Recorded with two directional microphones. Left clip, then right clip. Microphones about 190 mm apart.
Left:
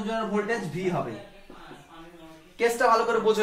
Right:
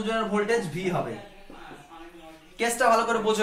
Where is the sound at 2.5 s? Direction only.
25° left (ahead or behind).